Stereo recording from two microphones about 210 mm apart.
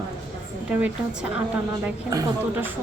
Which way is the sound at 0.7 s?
5° right (ahead or behind).